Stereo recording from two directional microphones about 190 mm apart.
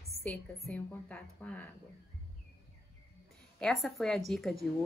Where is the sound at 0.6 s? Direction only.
5° left (ahead or behind).